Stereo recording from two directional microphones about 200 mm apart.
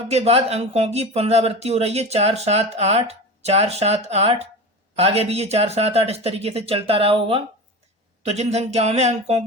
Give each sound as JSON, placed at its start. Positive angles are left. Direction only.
{"t": 0.1, "sound": "speech", "side_deg": -30}